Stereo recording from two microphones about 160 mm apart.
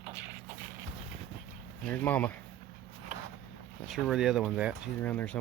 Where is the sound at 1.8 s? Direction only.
10° left (ahead or behind).